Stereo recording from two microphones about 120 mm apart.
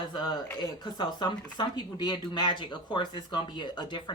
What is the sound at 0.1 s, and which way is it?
Speech, 40° left (ahead or behind).